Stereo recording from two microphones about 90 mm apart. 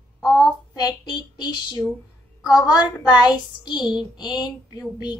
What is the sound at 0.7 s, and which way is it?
Child singing, 50° left (ahead or behind).